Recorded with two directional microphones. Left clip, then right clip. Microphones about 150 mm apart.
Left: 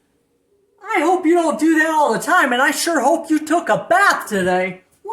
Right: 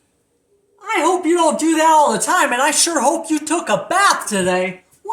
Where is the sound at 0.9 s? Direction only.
45° left (ahead or behind).